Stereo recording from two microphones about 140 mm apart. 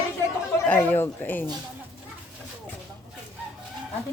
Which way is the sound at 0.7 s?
15° left (ahead or behind).